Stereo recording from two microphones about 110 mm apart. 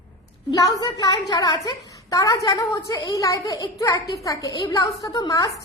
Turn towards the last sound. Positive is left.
turn(degrees=30)  # may be behind; listen again after turning